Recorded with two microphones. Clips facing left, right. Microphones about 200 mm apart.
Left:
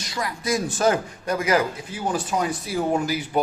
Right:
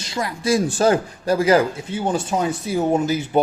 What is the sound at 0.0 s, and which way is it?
Speech, 25° right (ahead or behind).